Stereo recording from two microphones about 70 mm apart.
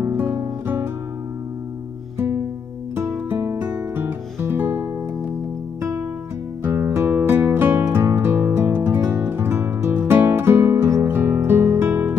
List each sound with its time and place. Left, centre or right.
0.0 s guitar: right
2.1 s music: right